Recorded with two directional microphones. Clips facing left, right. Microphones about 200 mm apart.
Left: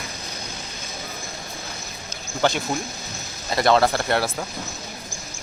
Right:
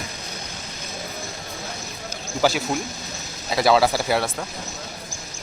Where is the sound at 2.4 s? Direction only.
5° right (ahead or behind).